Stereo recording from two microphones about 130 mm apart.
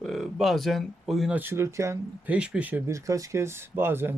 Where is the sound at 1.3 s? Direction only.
15° right (ahead or behind).